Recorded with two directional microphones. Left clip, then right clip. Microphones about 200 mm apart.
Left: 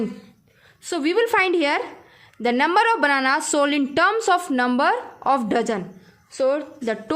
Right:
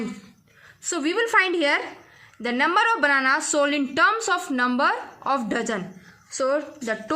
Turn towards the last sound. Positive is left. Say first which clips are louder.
# left 2 dB
turn(degrees=35)  # may be behind; listen again after turning